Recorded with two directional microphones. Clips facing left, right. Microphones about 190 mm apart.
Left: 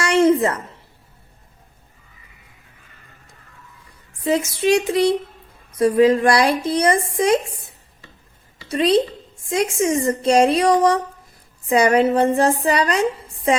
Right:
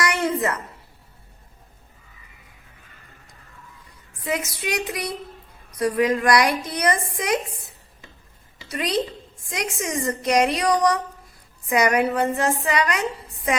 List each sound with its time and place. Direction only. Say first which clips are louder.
0.0 s a sound: left 8 dB; 25° left (ahead or behind)
4.2 s a woman's voice: left 8 dB; 25° left (ahead or behind)
8.7 s a woman's voice: left 8 dB; 25° left (ahead or behind)